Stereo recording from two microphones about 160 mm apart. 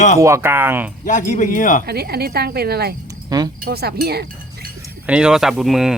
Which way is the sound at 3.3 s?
25° right (ahead or behind).